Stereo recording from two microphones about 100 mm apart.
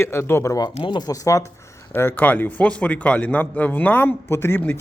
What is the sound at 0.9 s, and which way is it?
Speech, 40° left (ahead or behind).